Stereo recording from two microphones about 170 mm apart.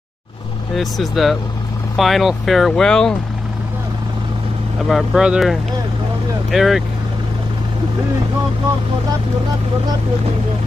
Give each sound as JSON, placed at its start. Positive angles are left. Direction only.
{"t": 0.7, "sound": "speech", "side_deg": 0}
{"t": 4.8, "sound": "speech", "side_deg": 0}